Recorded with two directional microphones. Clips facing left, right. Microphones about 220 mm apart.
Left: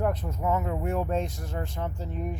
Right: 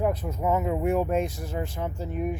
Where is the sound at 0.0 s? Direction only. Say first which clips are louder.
Right 2 dB; 5° right (ahead or behind).